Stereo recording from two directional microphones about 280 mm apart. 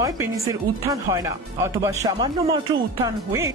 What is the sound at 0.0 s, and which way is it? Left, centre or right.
Speech, centre.